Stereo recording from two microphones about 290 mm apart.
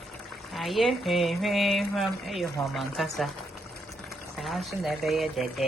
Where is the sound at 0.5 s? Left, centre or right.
Centre.